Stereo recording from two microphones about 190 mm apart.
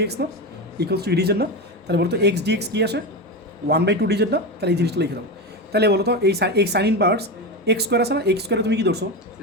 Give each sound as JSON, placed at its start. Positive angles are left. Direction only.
{"t": 0.0, "sound": "speech", "side_deg": -60}